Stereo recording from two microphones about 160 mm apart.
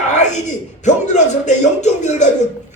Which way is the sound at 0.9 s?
50° left (ahead or behind).